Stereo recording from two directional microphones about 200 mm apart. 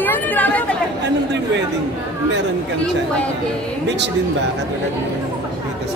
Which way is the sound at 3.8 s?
60° right (ahead or behind).